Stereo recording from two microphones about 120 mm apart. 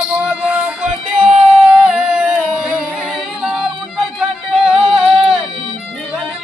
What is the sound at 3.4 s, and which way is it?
Music, 5° right (ahead or behind).